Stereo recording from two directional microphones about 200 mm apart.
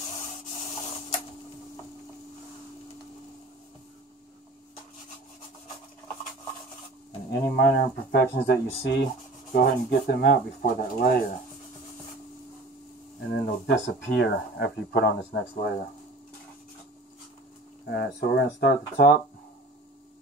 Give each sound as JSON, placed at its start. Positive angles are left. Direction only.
{"t": 7.2, "sound": "speech", "side_deg": 50}
{"t": 13.3, "sound": "speech", "side_deg": 60}
{"t": 17.8, "sound": "speech", "side_deg": 50}